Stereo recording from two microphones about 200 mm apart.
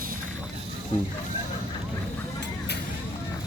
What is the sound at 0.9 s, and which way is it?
Speech, 35° left (ahead or behind).